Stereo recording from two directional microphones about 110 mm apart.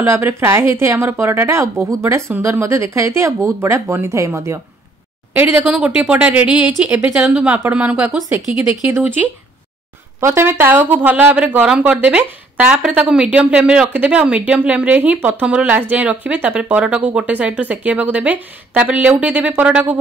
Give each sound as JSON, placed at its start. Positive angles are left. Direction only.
{"t": 0.0, "sound": "a woman's voice", "side_deg": -25}
{"t": 5.3, "sound": "speech", "side_deg": -10}
{"t": 10.2, "sound": "speech", "side_deg": -20}